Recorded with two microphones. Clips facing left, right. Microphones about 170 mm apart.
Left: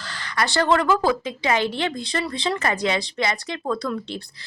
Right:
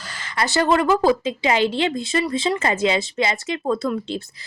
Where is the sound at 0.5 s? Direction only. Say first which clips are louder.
Right 2 dB; 20° right (ahead or behind).